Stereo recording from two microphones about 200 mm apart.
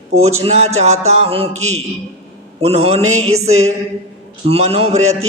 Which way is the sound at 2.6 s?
30° right (ahead or behind).